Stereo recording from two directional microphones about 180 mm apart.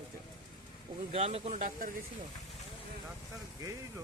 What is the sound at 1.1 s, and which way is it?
Speech, 35° right (ahead or behind).